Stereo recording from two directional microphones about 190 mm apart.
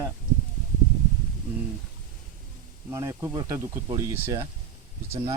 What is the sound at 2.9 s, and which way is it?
Speech, 15° right (ahead or behind).